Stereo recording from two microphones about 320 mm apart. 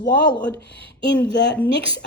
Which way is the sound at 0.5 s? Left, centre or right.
Left.